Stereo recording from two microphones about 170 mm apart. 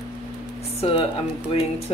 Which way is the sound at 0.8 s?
35° left (ahead or behind).